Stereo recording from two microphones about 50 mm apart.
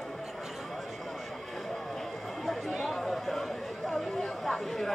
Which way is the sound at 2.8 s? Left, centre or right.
Centre.